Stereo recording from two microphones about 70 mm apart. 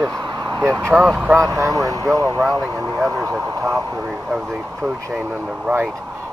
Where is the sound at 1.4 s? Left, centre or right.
Right.